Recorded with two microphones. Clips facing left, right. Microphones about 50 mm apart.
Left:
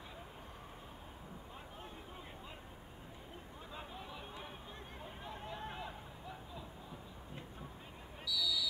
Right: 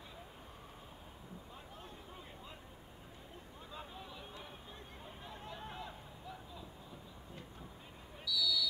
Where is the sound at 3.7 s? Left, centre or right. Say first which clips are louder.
Left 1 dB; centre.